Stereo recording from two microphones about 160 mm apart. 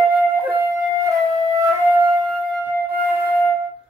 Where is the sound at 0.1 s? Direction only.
10° right (ahead or behind).